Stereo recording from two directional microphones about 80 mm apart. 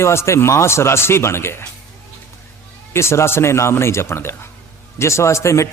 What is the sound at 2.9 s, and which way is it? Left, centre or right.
Speech, left.